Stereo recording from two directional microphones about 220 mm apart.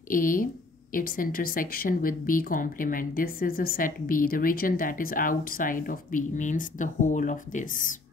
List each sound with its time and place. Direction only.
0.1 s speech: 40° left (ahead or behind)